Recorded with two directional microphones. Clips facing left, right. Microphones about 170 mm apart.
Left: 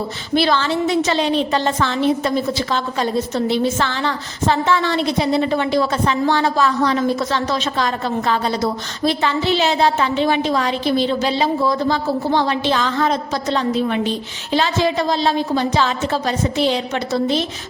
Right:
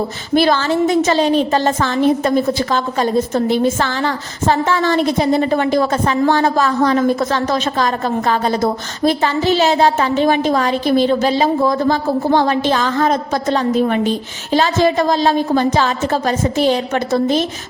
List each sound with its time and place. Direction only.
0.3 s a woman's voice: 45° right (ahead or behind)